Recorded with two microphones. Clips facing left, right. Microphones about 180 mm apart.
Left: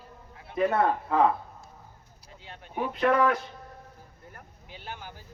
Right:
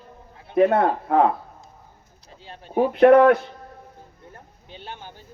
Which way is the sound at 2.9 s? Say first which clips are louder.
Right 11 dB; 60° right (ahead or behind).